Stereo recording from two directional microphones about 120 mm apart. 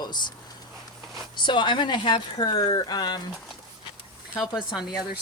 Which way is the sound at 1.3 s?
40° left (ahead or behind).